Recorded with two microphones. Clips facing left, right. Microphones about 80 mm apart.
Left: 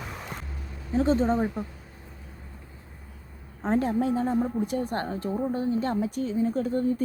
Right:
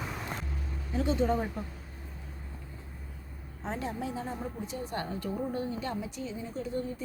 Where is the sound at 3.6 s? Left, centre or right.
Left.